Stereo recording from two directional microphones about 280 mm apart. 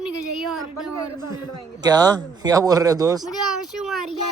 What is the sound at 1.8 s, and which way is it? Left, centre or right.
Speech, centre.